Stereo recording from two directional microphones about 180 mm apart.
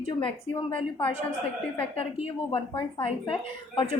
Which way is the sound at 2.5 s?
30° left (ahead or behind).